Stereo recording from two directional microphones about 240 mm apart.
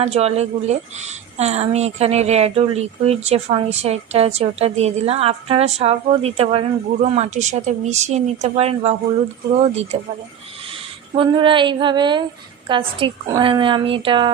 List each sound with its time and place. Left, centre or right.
0.0 s a woman's voice: right
11.1 s a woman's voice: right